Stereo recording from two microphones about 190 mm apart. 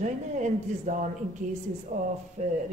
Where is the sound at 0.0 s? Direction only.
40° right (ahead or behind).